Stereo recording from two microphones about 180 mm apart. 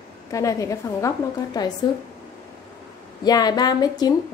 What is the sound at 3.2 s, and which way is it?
Speech, 20° left (ahead or behind).